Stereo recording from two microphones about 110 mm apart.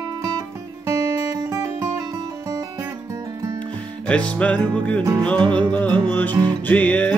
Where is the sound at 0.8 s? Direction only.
25° right (ahead or behind).